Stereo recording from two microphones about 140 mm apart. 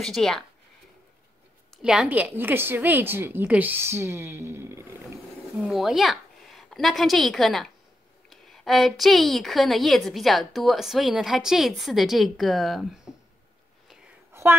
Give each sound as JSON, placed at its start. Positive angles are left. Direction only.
{"t": 0.0, "sound": "a woman's voice", "side_deg": 5}
{"t": 1.8, "sound": "a woman's voice", "side_deg": -5}
{"t": 5.6, "sound": "a woman's voice", "side_deg": -5}
{"t": 14.3, "sound": "a sound", "side_deg": -20}